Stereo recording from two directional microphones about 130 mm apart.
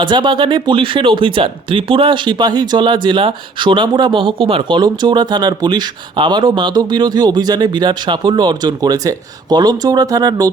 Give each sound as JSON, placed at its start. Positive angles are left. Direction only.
{"t": 0.0, "sound": "speech", "side_deg": -35}